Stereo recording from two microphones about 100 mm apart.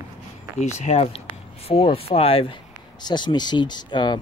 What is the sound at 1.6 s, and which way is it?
Speech, 70° left (ahead or behind).